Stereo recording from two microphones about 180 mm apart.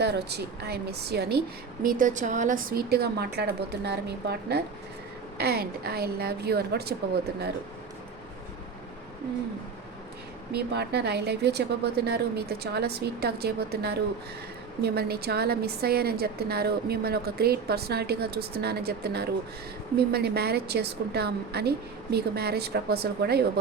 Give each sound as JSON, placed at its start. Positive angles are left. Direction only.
{"t": 0.0, "sound": "a woman's voice", "side_deg": -65}
{"t": 10.5, "sound": "a woman's voice", "side_deg": -65}